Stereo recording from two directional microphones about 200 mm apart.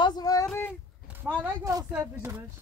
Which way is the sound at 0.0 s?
20° left (ahead or behind).